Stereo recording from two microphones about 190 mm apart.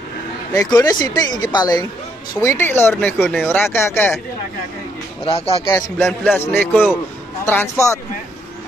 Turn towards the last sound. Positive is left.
turn(degrees=15)  # may be behind; listen again after turning